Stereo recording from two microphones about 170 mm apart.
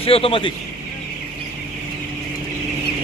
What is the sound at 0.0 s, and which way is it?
Speech, 35° left (ahead or behind).